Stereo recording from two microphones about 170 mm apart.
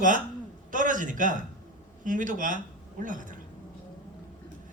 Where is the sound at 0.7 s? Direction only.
50° right (ahead or behind).